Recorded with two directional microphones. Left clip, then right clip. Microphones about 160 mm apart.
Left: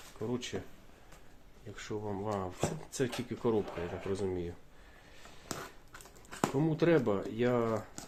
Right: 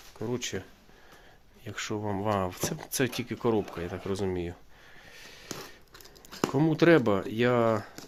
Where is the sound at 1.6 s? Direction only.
65° right (ahead or behind); by 4.5 s 50° right (ahead or behind).